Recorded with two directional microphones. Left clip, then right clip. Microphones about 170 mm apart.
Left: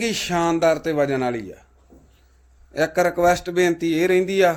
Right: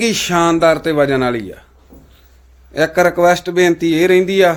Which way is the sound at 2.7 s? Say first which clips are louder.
Right 7 dB; 5° right (ahead or behind).